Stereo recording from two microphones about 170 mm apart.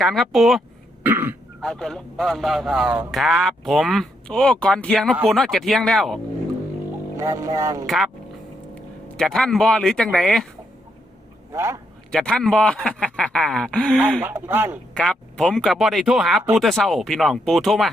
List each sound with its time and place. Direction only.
0.0 s a man's voice: centre (ahead or behind)
1.0 s speech: 10° right (ahead or behind)
1.6 s a man's voice: 5° left (ahead or behind)
7.2 s speech: 20° right (ahead or behind)
9.1 s a man's voice: centre (ahead or behind)
11.5 s speech: 15° right (ahead or behind)
12.1 s a man's voice: 5° left (ahead or behind)
14.2 s speech: 10° right (ahead or behind)
14.9 s a man's voice: 5° left (ahead or behind)